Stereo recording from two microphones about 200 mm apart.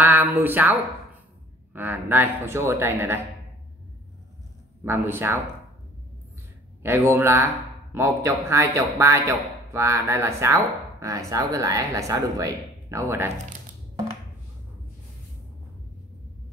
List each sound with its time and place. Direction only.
0.0 s a sound: 10° right (ahead or behind)
0.4 s speech: 10° right (ahead or behind)
4.8 s speech: 10° right (ahead or behind)
6.8 s speech: 10° right (ahead or behind)